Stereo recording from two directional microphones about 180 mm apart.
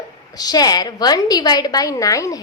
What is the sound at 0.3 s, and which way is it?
A woman's voice, 20° left (ahead or behind).